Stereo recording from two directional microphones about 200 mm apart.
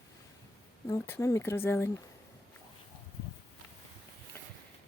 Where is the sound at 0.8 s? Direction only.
10° left (ahead or behind).